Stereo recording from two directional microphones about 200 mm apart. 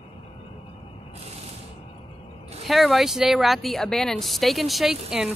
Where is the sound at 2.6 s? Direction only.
Centre (ahead or behind).